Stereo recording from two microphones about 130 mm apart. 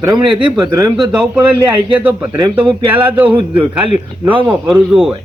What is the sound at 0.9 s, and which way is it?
Speech, 5° right (ahead or behind).